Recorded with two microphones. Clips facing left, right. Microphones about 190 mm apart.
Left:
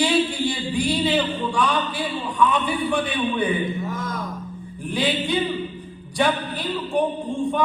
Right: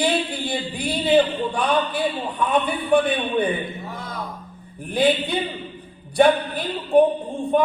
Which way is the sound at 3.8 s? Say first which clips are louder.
Left 4 dB; 45° left (ahead or behind).